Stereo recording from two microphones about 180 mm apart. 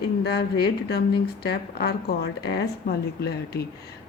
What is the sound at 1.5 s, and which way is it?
Speech, 60° left (ahead or behind).